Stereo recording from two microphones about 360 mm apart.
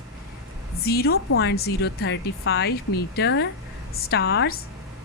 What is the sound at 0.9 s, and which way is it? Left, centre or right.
Speech, left.